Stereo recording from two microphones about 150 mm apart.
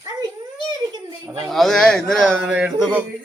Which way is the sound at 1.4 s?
Centre (ahead or behind).